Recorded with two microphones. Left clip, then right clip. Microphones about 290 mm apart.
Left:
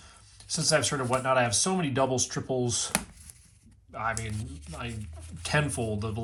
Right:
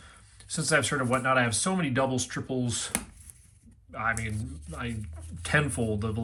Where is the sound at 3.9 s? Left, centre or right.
Centre.